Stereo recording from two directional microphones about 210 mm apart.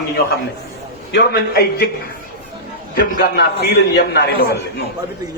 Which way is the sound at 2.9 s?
45° left (ahead or behind).